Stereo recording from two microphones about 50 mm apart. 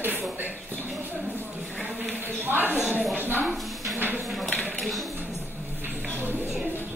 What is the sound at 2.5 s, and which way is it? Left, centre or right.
A woman's voice, right.